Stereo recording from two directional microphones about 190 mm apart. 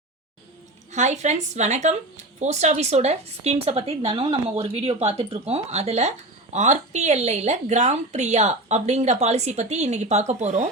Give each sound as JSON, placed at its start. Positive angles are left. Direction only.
{"t": 0.9, "sound": "a woman's voice", "side_deg": -40}